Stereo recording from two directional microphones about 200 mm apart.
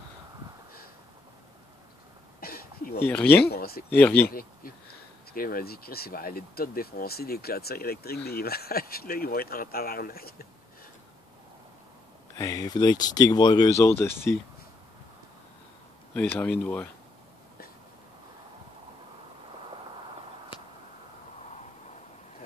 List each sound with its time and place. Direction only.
2.4 s throat clearing: 50° left (ahead or behind)
3.0 s speech: 10° left (ahead or behind)
3.4 s a sound: 50° left (ahead or behind)
4.3 s speech: 45° left (ahead or behind)
12.4 s speech: 15° left (ahead or behind)
16.2 s speech: 10° left (ahead or behind)